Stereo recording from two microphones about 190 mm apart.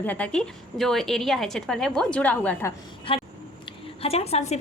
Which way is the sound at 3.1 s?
30° left (ahead or behind).